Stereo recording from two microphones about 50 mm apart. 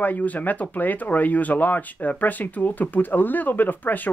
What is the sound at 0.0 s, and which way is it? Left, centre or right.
Speech, left.